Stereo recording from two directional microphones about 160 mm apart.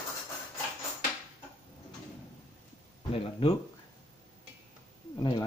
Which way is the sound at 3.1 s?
35° left (ahead or behind).